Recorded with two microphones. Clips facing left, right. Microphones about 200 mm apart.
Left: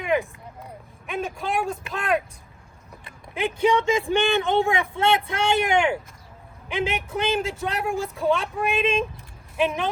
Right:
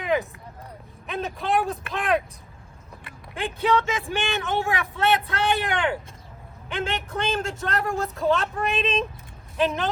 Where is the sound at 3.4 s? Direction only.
15° left (ahead or behind).